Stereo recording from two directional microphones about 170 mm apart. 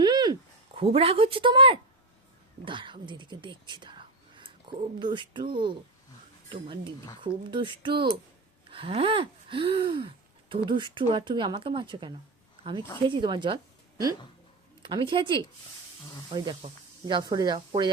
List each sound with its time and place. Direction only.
0.0 s a sound: 25° right (ahead or behind)
0.8 s speech: 35° right (ahead or behind)
14.8 s speech: 30° right (ahead or behind)